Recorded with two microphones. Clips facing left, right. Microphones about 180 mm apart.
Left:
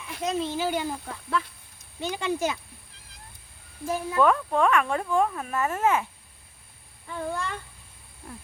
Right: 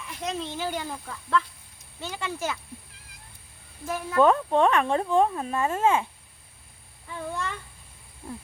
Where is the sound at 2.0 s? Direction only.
15° left (ahead or behind).